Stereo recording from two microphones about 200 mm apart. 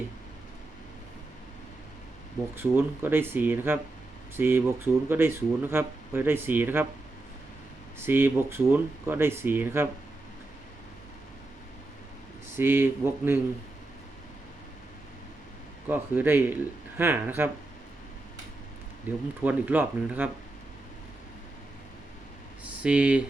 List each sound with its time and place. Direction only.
2.6 s speech: 10° right (ahead or behind)
7.9 s speech: 10° right (ahead or behind)
12.5 s speech: 10° right (ahead or behind)
15.9 s speech: 10° right (ahead or behind)
19.1 s speech: 10° right (ahead or behind)
22.6 s speech: 5° right (ahead or behind)